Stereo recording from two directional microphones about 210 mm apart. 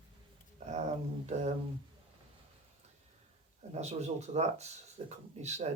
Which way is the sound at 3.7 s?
30° right (ahead or behind).